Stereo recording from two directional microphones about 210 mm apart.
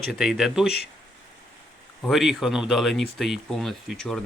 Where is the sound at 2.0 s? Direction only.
Centre (ahead or behind).